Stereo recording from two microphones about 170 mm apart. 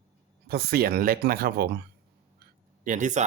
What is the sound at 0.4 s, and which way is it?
Speech, 65° right (ahead or behind).